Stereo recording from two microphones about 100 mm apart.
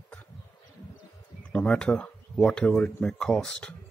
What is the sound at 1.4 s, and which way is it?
Speech, 15° left (ahead or behind).